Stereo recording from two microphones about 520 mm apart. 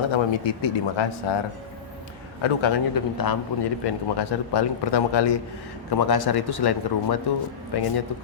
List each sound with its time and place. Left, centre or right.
0.1 s speech: left
2.4 s speech: left
2.9 s a man's voice: left